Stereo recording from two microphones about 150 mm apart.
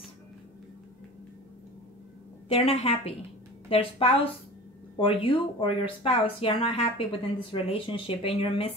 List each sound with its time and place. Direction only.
2.4 s speech: 40° left (ahead or behind)